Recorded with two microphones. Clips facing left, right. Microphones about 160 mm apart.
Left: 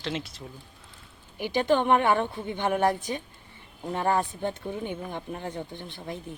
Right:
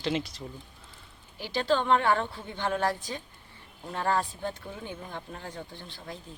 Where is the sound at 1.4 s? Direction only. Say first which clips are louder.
Left 4 dB; 15° left (ahead or behind).